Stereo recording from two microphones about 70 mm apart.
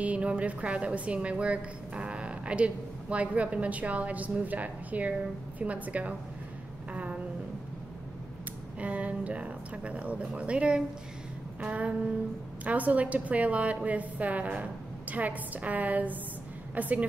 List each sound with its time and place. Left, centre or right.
0.0 s a woman's voice: centre
6.9 s a sound: centre
8.7 s a woman's voice: centre